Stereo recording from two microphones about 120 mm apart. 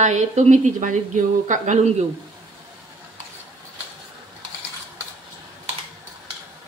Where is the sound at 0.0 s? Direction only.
80° right.